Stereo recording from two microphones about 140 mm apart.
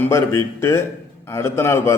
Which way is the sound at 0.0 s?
20° left (ahead or behind).